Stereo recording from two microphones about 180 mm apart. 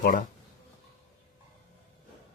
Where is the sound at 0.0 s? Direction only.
50° left (ahead or behind).